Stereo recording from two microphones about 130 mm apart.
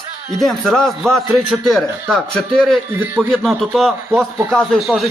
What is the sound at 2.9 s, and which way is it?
Speech, 15° right (ahead or behind).